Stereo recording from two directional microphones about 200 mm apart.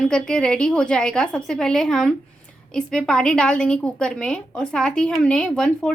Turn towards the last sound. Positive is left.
turn(degrees=5)  # may be behind; listen again after turning